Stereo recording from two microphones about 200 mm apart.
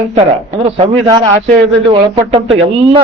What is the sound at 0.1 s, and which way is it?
Speech, 30° right (ahead or behind).